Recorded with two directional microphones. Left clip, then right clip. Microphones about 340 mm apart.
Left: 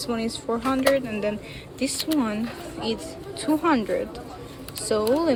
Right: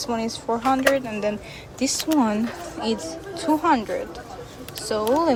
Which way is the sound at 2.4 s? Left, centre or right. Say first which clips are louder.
Right 3 dB; right.